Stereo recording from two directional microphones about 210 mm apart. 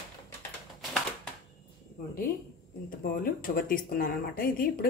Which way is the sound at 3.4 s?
40° left (ahead or behind).